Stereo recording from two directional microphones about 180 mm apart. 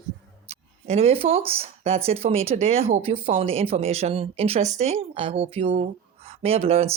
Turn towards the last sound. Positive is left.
turn(degrees=-35)  # may be behind; listen again after turning